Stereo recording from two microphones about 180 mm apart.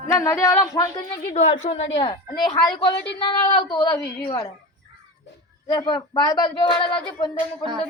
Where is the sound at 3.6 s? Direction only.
20° left (ahead or behind).